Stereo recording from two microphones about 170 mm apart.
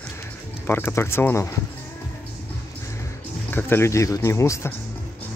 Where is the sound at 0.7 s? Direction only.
10° left (ahead or behind).